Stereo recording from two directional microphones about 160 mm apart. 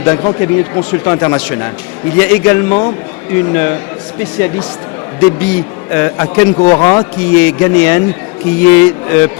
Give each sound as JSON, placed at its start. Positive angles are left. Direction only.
{"t": 0.0, "sound": "speech", "side_deg": 15}
{"t": 6.6, "sound": "a man's voice", "side_deg": 45}
{"t": 6.8, "sound": "speech", "side_deg": 10}